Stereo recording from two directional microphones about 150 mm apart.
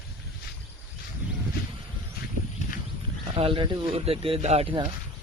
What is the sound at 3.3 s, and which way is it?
Speech, 35° right (ahead or behind).